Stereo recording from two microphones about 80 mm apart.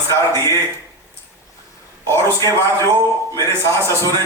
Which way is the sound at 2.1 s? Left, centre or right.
Left.